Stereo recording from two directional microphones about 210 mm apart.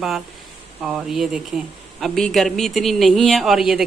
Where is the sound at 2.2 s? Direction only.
Centre (ahead or behind).